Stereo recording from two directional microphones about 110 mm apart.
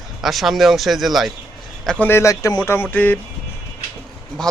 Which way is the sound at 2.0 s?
20° left (ahead or behind).